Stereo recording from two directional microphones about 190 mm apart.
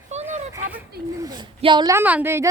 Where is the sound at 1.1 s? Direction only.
20° right (ahead or behind).